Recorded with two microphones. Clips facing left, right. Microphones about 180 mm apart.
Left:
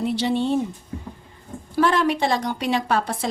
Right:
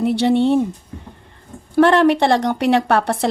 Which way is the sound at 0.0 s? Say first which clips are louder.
Right 7 dB; 60° right (ahead or behind).